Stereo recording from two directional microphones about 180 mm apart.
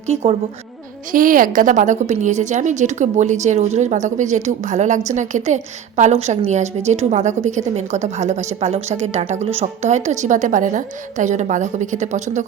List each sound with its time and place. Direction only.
0.1 s a woman's voice: 35° right (ahead or behind)
1.1 s a woman's voice: 50° right (ahead or behind)